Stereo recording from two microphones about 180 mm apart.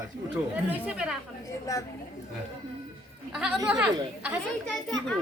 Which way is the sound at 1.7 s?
20° left (ahead or behind).